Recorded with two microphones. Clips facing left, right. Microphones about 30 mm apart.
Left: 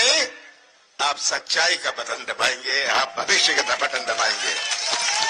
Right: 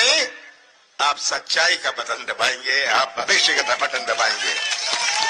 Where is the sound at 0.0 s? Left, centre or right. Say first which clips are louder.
Right 2 dB; centre.